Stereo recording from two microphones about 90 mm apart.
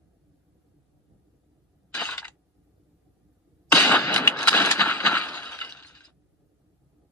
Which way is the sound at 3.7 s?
15° left (ahead or behind).